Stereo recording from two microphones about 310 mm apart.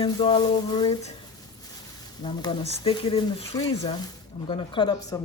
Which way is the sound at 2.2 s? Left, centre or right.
Centre.